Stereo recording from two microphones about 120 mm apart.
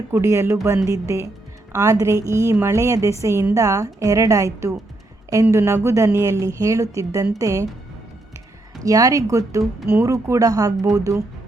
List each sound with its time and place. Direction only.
0.1 s a woman's voice: 20° right (ahead or behind)
8.8 s a woman's voice: 30° right (ahead or behind)